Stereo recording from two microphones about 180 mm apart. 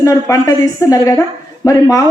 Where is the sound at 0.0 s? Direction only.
20° left (ahead or behind).